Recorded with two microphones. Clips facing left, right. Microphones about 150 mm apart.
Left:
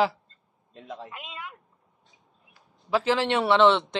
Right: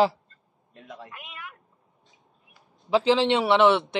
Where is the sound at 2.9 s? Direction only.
20° right (ahead or behind).